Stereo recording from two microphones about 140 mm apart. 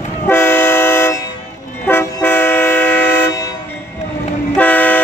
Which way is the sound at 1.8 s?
15° left (ahead or behind).